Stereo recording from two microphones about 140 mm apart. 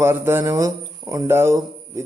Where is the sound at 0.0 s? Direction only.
15° right (ahead or behind).